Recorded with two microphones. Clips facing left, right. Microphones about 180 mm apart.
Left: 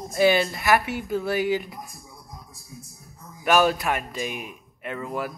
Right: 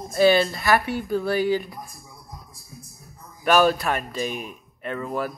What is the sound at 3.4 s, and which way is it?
Speech, 15° left (ahead or behind).